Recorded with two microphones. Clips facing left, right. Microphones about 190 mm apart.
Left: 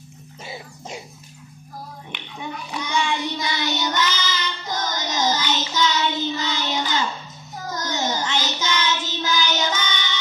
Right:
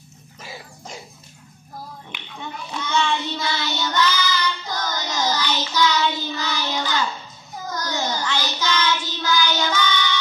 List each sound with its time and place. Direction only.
0.4 s dog: 20° left (ahead or behind)
2.3 s child singing: 15° left (ahead or behind)